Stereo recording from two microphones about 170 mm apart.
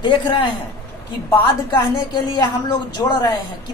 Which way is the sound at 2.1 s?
20° left (ahead or behind).